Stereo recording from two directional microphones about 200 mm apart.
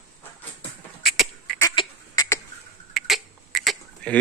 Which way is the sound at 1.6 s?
15° left (ahead or behind).